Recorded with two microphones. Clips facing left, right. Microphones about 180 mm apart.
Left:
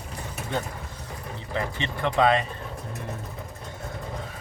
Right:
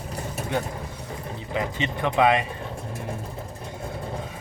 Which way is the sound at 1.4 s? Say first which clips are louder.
Right 2 dB; 15° right (ahead or behind).